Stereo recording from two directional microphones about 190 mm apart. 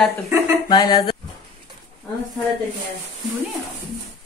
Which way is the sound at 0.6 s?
20° left (ahead or behind).